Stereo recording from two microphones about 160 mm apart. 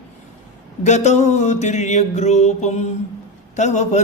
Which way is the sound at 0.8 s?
45° left (ahead or behind).